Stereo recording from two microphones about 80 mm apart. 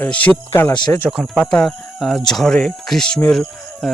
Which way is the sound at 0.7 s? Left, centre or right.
Left.